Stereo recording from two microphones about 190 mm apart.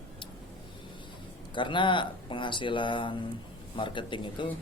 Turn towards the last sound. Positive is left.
turn(degrees=25)  # may be behind; listen again after turning